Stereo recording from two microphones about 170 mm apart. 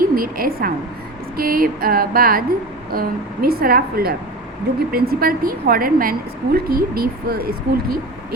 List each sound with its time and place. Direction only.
0.0 s a woman's voice: 60° right (ahead or behind)